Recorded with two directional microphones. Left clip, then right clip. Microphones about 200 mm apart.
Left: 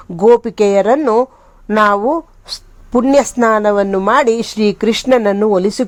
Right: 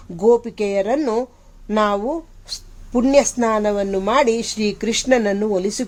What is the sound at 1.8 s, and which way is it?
Speech, 25° left (ahead or behind).